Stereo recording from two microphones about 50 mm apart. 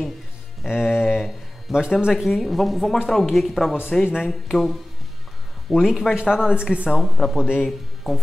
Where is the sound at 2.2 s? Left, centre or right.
Centre.